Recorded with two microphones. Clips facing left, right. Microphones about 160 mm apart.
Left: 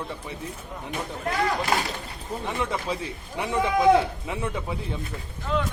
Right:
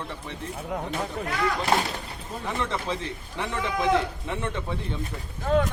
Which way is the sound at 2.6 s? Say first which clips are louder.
Even; 10° left (ahead or behind).